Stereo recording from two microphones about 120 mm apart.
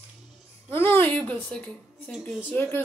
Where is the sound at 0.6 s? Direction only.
20° left (ahead or behind).